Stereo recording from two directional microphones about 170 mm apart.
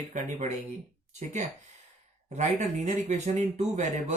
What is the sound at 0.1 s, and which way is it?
Speech, 40° right (ahead or behind).